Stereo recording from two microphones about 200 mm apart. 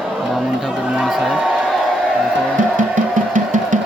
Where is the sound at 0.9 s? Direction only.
5° right (ahead or behind).